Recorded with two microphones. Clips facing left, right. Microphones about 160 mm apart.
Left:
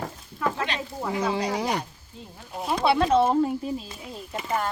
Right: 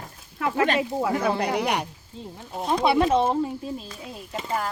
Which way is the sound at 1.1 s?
60° right (ahead or behind).